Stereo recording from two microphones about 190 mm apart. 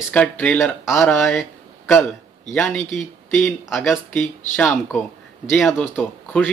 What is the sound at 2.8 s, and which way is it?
Speech, 40° left (ahead or behind).